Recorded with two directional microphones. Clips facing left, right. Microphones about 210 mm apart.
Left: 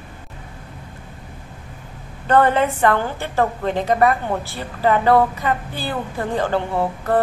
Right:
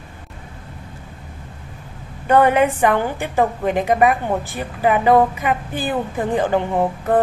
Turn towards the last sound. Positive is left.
turn(degrees=-15)  # may be behind; listen again after turning